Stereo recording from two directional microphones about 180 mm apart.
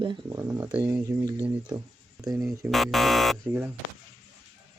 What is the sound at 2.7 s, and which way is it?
Speech, centre (ahead or behind).